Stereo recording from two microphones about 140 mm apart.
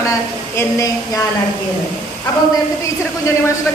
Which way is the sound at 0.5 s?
20° left (ahead or behind).